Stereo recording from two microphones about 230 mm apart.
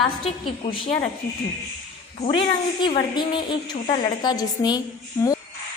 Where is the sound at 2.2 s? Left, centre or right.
Left.